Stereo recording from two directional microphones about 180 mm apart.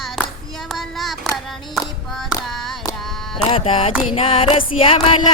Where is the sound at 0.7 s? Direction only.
Centre (ahead or behind).